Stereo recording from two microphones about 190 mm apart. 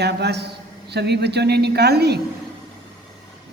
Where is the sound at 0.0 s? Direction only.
60° right (ahead or behind).